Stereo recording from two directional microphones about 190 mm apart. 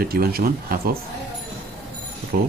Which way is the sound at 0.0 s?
50° right (ahead or behind).